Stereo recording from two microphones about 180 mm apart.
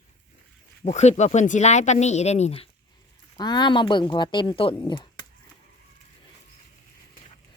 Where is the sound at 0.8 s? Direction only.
40° left (ahead or behind).